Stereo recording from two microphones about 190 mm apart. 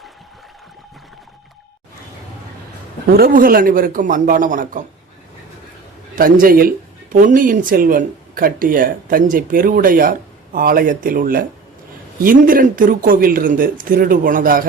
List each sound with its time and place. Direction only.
3.1 s speech: 50° right (ahead or behind)
6.4 s speech: 50° right (ahead or behind)